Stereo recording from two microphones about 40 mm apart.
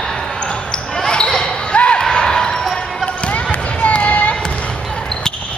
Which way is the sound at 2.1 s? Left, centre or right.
Centre.